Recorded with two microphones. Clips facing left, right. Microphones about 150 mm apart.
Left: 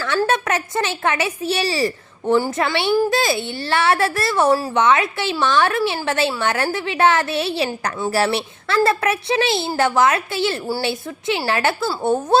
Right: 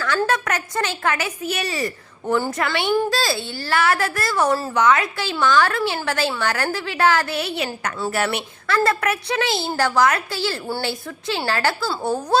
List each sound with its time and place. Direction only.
0.3 s a woman's voice: 25° left (ahead or behind)